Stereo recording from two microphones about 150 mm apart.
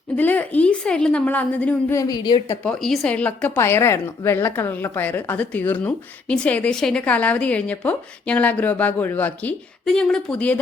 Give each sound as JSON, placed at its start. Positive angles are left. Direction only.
{"t": 0.2, "sound": "speech", "side_deg": 10}
{"t": 2.0, "sound": "a woman's voice", "side_deg": 25}
{"t": 2.5, "sound": "speech", "side_deg": 5}